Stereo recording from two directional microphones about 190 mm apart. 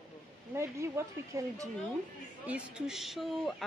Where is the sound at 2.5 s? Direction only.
5° right (ahead or behind).